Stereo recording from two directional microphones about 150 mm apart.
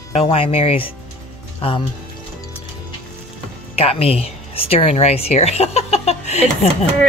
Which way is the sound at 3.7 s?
40° left (ahead or behind).